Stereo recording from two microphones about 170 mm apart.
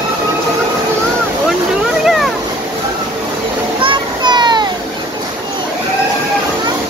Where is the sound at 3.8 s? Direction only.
30° right (ahead or behind).